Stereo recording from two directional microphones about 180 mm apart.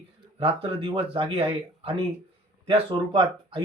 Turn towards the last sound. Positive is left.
turn(degrees=-30)  # may be behind; listen again after turning